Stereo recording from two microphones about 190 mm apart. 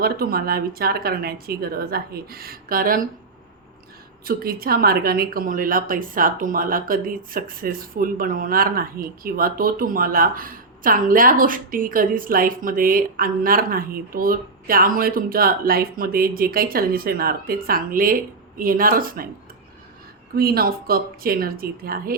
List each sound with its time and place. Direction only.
0.0 s speech: 55° right (ahead or behind)
4.3 s speech: 50° right (ahead or behind)
20.3 s speech: 55° right (ahead or behind)